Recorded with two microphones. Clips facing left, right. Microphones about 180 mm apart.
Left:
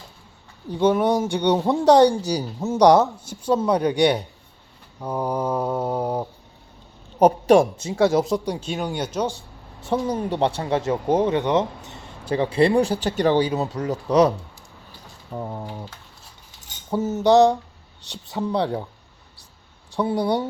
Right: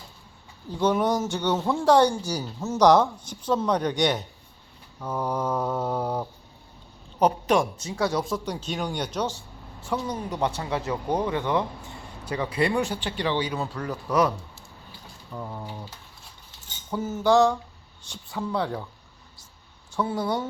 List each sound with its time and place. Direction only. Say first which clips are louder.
0.7 s speech: left 4 dB; 10° left (ahead or behind)
7.3 s speech: left 7 dB; 45° left (ahead or behind)
7.8 s speech: left 7 dB; 25° left (ahead or behind); by 9.3 s 10° left (ahead or behind)
9.9 s speech: left 6 dB; 30° left (ahead or behind)
13.8 s speech: left 6 dB; 20° left (ahead or behind)
16.9 s speech: left 4 dB; 20° left (ahead or behind)
18.5 s speech: left 4 dB; 30° left (ahead or behind)
20.1 s speech: left 6 dB; 35° left (ahead or behind)